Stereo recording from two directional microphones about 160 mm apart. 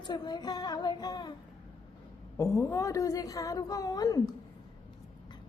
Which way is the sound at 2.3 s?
20° left (ahead or behind).